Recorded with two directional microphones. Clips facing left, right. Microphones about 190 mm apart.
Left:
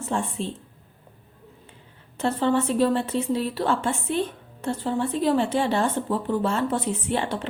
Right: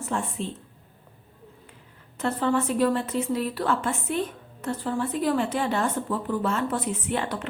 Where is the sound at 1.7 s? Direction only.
30° left (ahead or behind).